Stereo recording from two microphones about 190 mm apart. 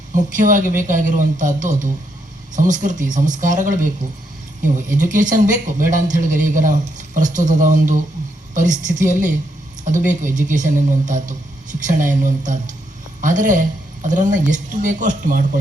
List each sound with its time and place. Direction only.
0.3 s a man's voice: 45° right (ahead or behind)